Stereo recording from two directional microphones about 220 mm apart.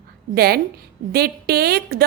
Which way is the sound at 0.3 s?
45° right (ahead or behind).